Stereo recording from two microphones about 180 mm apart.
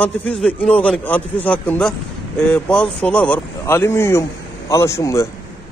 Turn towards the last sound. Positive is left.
turn(degrees=15)  # may be behind; listen again after turning